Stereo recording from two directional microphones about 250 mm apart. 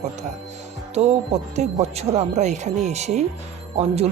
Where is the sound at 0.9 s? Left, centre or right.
Right.